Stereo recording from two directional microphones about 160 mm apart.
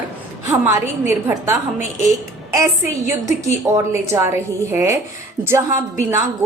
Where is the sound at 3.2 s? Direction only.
20° right (ahead or behind).